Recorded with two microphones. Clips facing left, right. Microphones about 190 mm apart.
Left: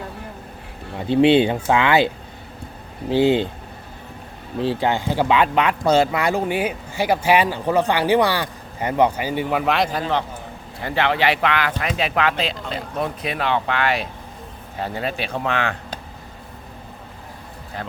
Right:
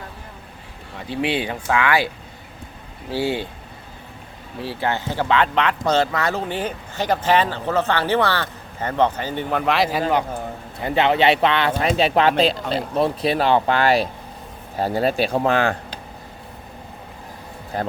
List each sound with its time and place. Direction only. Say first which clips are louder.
0.9 s speech: left 9 dB; 25° left (ahead or behind)
3.1 s speech: left 6 dB; 20° left (ahead or behind)
4.6 s speech: left 4 dB; 15° left (ahead or behind); by 10.0 s centre (ahead or behind)
10.8 s speech: right 3 dB; 20° right (ahead or behind); by 15.8 s 35° right (ahead or behind)
17.7 s speech: right 7 dB; 45° right (ahead or behind)